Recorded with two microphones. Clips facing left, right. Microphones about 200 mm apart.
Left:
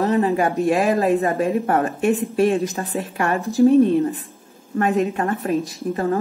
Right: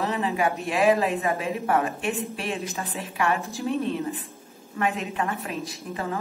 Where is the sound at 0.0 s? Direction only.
45° left (ahead or behind).